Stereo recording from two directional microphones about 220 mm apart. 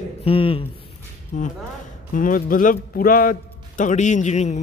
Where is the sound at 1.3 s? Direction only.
35° left (ahead or behind).